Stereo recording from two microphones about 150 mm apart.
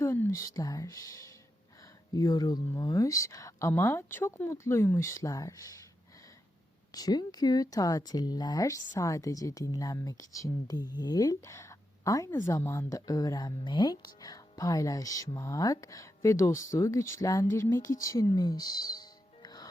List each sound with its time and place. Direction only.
0.0 s a woman's voice: 20° left (ahead or behind)
6.9 s a woman's voice: 25° left (ahead or behind)